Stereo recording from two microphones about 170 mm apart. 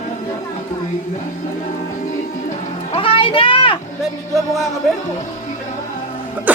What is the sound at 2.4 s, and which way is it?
Music, 35° left (ahead or behind).